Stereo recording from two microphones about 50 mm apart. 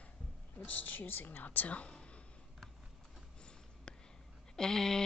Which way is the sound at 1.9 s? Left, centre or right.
Left.